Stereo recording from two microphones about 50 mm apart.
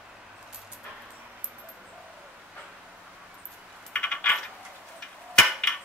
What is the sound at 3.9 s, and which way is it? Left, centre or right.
Coin, left.